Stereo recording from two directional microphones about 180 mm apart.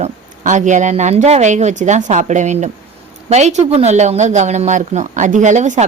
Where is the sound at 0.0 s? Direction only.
40° right (ahead or behind).